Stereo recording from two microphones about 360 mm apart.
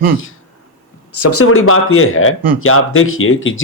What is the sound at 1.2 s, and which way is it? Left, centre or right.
A man's voice, left.